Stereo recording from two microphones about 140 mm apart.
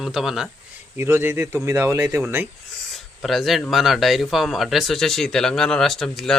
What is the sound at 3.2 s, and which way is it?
Speech, centre (ahead or behind).